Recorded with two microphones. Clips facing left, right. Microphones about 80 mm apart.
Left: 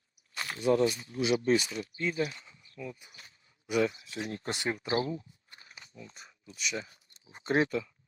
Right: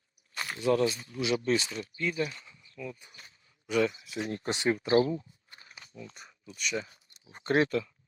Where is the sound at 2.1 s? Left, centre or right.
Centre.